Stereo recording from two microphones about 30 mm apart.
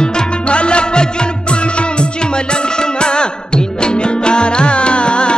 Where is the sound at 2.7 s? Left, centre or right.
Left.